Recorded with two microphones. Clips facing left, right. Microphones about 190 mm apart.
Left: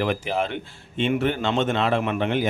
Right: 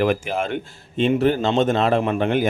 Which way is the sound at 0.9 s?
35° right (ahead or behind).